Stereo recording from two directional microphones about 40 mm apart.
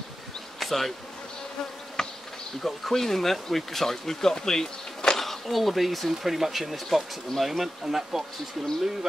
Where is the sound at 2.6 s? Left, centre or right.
Centre.